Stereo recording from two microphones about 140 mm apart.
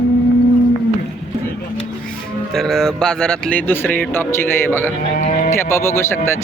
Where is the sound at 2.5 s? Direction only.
5° left (ahead or behind).